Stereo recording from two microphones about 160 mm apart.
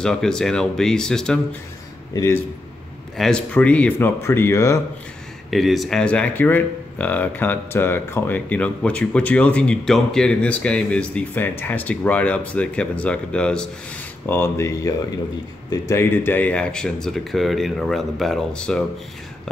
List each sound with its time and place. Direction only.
0.0 s speech: 5° left (ahead or behind)
2.1 s speech: 15° left (ahead or behind)
3.2 s speech: 5° left (ahead or behind)
5.5 s speech: centre (ahead or behind)